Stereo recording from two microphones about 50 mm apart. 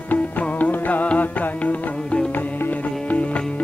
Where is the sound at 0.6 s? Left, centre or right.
Left.